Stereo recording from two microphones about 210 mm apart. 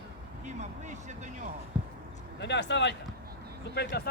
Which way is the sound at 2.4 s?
55° left (ahead or behind).